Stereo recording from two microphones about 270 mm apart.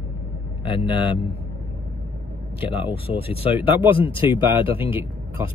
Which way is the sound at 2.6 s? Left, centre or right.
Centre.